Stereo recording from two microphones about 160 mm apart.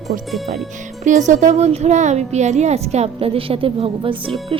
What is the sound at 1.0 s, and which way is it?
Speech, 50° right (ahead or behind).